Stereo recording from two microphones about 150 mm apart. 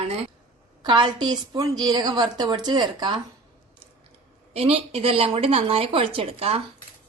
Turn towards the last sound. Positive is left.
turn(degrees=-40)  # may be behind; listen again after turning